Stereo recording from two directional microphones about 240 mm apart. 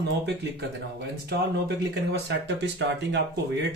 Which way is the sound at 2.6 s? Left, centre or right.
Right.